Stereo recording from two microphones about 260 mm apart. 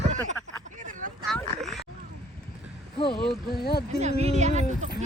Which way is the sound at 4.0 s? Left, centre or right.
Right.